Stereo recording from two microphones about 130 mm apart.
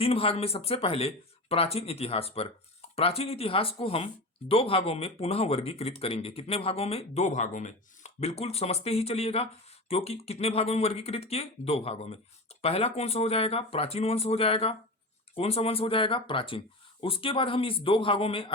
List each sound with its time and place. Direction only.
0.0 s speech: 50° left (ahead or behind)